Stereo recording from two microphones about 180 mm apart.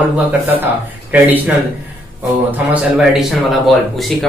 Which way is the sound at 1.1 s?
10° right (ahead or behind).